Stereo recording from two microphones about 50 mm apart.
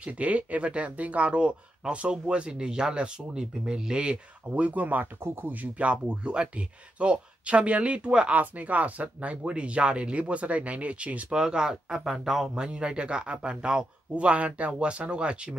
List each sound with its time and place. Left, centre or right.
0.0 s speech: right
5.2 s speech: right
5.5 s speech: right
11.2 s speech: centre
12.5 s speech: centre